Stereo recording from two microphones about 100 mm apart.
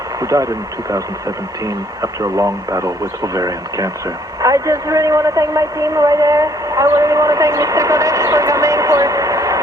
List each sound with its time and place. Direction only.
0.2 s speech: 35° right (ahead or behind)
1.6 s a woman's voice: 35° right (ahead or behind)